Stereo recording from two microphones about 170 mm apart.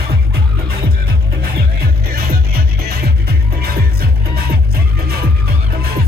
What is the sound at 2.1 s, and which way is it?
Music, 65° right (ahead or behind).